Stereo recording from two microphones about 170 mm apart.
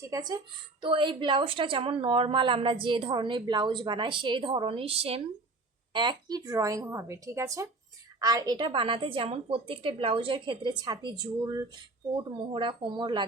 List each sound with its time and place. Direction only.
0.1 s a woman's voice: 25° right (ahead or behind)